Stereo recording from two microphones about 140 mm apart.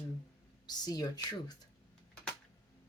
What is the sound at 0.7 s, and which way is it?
Speech, 30° left (ahead or behind).